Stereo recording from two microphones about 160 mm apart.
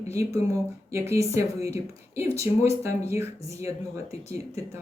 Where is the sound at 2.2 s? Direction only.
40° left (ahead or behind).